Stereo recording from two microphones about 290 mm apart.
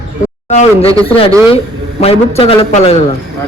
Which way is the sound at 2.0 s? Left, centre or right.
Left.